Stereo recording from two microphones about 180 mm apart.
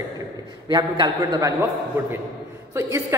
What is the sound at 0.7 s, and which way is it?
A man's voice, 25° right (ahead or behind).